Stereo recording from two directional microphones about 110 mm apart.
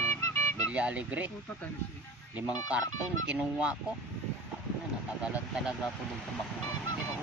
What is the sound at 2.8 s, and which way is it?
Speech, 35° left (ahead or behind).